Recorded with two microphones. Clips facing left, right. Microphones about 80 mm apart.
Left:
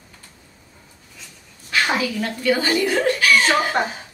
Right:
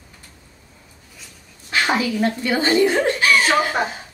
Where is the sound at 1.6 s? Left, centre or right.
Right.